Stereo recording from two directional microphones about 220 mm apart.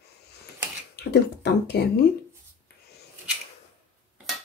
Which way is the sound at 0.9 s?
50° left (ahead or behind).